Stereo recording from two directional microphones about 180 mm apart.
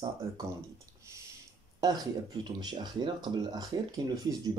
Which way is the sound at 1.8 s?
25° right (ahead or behind).